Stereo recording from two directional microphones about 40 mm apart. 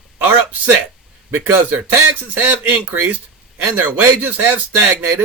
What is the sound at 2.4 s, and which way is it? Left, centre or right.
Speech, right.